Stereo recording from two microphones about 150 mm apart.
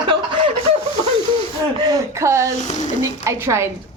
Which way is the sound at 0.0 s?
30° right (ahead or behind).